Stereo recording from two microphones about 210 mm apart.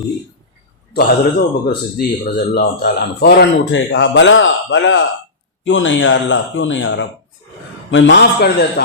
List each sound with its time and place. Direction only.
0.9 s a man's voice: 45° left (ahead or behind)